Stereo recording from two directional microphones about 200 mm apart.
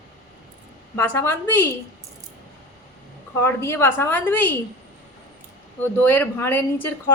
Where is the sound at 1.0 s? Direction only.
10° left (ahead or behind).